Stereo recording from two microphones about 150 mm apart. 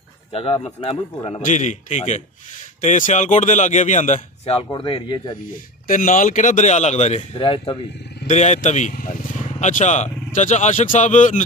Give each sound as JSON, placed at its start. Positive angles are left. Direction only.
{"t": 0.3, "sound": "speech", "side_deg": 40}
{"t": 1.4, "sound": "speech", "side_deg": 55}
{"t": 4.7, "sound": "speech", "side_deg": 35}
{"t": 5.9, "sound": "a man's voice", "side_deg": 60}
{"t": 7.3, "sound": "speech", "side_deg": 35}
{"t": 8.3, "sound": "speech", "side_deg": 50}